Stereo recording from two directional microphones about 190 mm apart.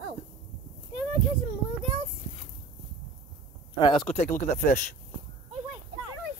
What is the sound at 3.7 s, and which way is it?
Speech, 25° left (ahead or behind).